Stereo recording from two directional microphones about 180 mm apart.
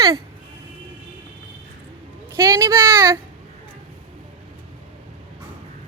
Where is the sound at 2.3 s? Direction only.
15° right (ahead or behind).